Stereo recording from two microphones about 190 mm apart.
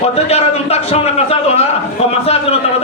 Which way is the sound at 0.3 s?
35° left (ahead or behind).